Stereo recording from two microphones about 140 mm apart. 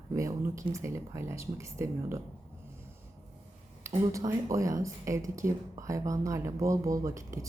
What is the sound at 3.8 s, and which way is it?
Speech, 25° right (ahead or behind).